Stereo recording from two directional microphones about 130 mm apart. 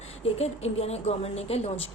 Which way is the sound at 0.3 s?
55° left (ahead or behind).